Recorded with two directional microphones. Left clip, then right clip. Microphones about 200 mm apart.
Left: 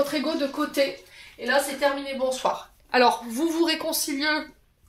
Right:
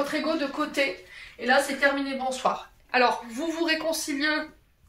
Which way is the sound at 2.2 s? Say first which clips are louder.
Left 3 dB; 60° left (ahead or behind).